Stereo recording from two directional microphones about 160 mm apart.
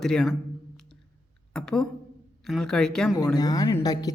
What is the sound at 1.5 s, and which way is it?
A man's voice, 5° left (ahead or behind).